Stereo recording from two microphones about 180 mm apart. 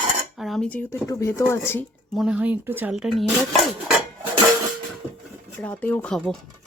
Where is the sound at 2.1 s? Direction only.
5° right (ahead or behind).